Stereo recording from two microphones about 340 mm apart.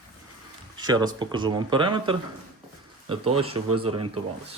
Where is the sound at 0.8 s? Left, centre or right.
Centre.